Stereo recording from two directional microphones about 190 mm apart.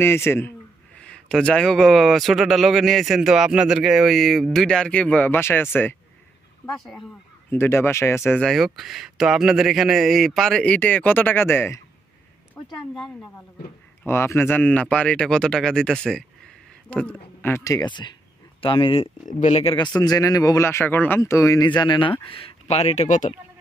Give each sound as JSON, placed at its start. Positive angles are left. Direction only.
{"t": 0.0, "sound": "a man's voice", "side_deg": 10}
{"t": 12.7, "sound": "a man's voice", "side_deg": 5}